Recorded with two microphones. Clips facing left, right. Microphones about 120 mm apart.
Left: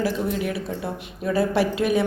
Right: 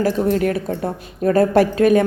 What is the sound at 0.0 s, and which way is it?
A woman's voice, 50° right (ahead or behind).